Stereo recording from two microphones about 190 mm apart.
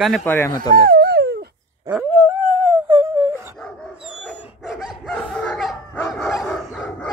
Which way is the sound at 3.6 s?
5° left (ahead or behind).